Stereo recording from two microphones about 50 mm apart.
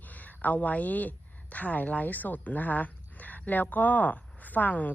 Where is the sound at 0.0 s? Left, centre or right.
Left.